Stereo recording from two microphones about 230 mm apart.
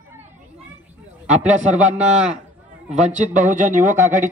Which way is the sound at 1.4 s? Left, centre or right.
Right.